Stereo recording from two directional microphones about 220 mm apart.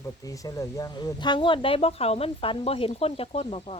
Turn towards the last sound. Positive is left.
turn(degrees=25)  # may be behind; listen again after turning